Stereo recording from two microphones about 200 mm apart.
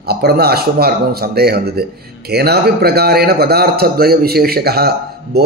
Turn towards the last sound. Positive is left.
turn(degrees=-50)  # may be behind; listen again after turning